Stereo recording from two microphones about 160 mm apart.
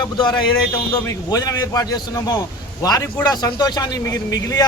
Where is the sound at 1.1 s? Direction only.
20° left (ahead or behind).